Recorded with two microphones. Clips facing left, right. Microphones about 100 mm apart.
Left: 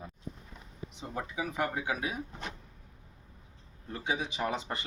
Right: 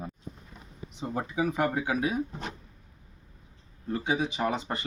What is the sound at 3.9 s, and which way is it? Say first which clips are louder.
Speech: right 6 dB; 40° right (ahead or behind).